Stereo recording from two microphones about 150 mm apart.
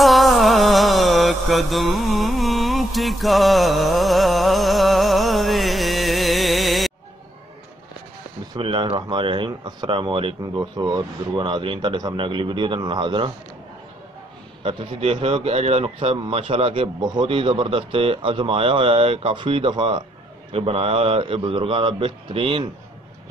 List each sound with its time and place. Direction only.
0.0 s mantra: centre (ahead or behind)
8.5 s speech: 35° right (ahead or behind)
14.6 s speech: 35° right (ahead or behind)